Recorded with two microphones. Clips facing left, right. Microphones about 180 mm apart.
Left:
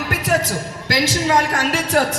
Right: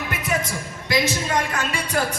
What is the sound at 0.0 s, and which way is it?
A woman's voice, 90° left.